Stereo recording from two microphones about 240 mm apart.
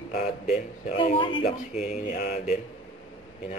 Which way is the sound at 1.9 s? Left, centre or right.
Left.